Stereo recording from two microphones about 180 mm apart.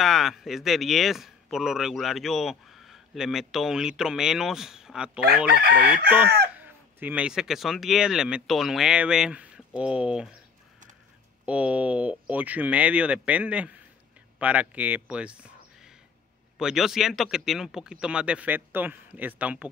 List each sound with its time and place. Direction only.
0.0 s a man's voice: centre (ahead or behind)
6.6 s a man's voice: 10° right (ahead or behind)
11.4 s a man's voice: 5° right (ahead or behind)